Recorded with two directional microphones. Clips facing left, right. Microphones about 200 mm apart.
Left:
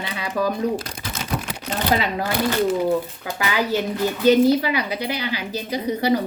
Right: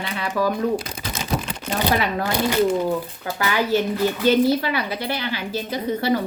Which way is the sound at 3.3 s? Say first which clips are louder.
Right 2 dB; 15° left (ahead or behind).